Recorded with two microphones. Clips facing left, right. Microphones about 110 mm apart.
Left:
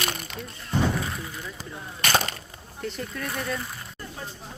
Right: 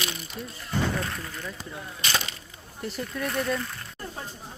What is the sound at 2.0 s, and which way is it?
Splinter, 50° left (ahead or behind).